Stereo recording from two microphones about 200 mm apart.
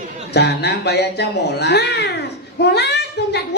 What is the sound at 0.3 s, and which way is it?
A child's voice, 55° left (ahead or behind).